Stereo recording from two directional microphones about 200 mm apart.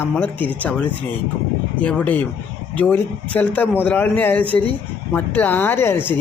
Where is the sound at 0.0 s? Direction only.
10° left (ahead or behind).